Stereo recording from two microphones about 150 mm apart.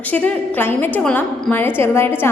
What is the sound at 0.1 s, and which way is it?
A woman's voice, 10° left (ahead or behind).